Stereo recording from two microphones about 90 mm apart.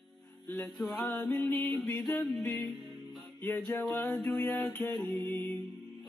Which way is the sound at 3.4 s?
15° left (ahead or behind).